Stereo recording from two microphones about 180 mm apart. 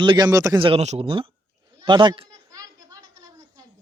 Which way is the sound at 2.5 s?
20° right (ahead or behind).